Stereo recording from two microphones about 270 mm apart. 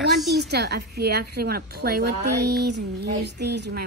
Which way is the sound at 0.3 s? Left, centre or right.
Right.